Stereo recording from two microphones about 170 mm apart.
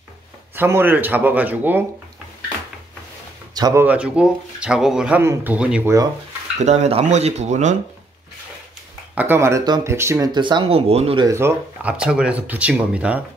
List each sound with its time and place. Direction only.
0.6 s speech: 10° right (ahead or behind)
3.5 s speech: 20° right (ahead or behind)
3.8 s speech: 10° right (ahead or behind)
6.6 s speech: 40° right (ahead or behind)
9.1 s speech: 10° right (ahead or behind); by 11.2 s 35° right (ahead or behind)
11.2 s speech: 15° right (ahead or behind)